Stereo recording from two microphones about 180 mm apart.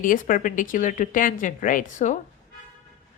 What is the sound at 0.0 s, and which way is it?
A woman's voice, 50° left (ahead or behind).